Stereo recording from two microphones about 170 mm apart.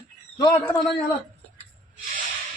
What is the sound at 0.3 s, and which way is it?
Speech, 20° left (ahead or behind).